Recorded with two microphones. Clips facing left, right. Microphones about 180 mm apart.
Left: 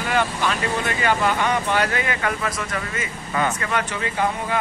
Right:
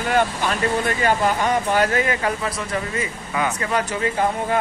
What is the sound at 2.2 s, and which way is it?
Speech, 30° right (ahead or behind).